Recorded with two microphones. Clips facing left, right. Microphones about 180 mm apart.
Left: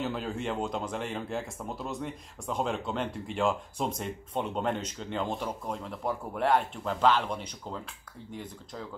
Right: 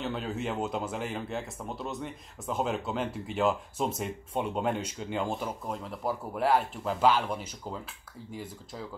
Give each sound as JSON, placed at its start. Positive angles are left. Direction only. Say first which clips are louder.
{"t": 0.0, "sound": "speech", "louder": "even", "side_deg": 0}